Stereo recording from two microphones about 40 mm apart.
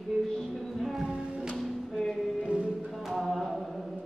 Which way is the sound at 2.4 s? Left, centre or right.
Right.